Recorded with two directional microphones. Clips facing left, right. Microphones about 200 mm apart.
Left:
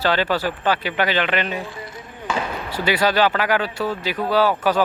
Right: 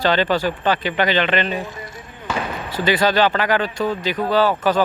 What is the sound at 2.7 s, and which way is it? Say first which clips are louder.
Speech: right 2 dB; 10° left (ahead or behind).